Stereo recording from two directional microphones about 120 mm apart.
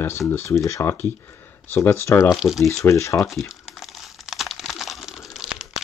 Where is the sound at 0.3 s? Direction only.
25° left (ahead or behind).